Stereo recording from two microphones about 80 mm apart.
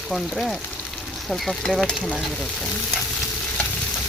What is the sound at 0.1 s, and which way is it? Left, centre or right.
Speech, centre.